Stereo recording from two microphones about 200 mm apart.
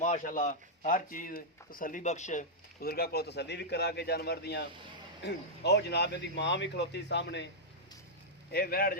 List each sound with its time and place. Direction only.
0.0 s speech: 40° left (ahead or behind); by 7.4 s 60° left (ahead or behind)
8.5 s speech: 50° left (ahead or behind)